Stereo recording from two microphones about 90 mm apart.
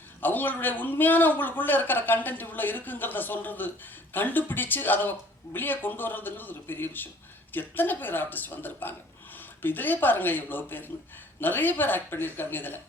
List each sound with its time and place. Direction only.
0.2 s speech: 20° left (ahead or behind)